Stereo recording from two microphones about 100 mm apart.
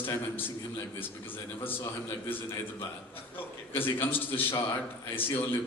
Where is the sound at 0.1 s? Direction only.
20° left (ahead or behind).